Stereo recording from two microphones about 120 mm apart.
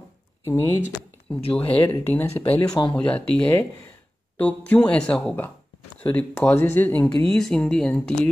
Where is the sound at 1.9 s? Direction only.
15° left (ahead or behind).